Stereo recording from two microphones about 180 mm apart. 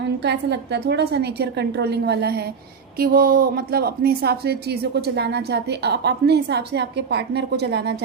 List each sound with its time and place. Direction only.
0.0 s a woman's voice: 70° right (ahead or behind)
3.0 s a woman's voice: 55° right (ahead or behind)